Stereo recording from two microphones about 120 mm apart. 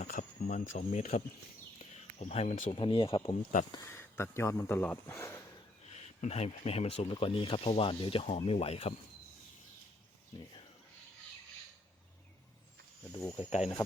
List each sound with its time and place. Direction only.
0.0 s speech: 90° left; by 1.2 s 65° left (ahead or behind)
1.8 s a sound: 70° left (ahead or behind)
2.7 s speech: 45° left (ahead or behind)
3.9 s speech: 20° left (ahead or behind)
5.9 s speech: 65° left (ahead or behind)
13.1 s speech: 15° left (ahead or behind)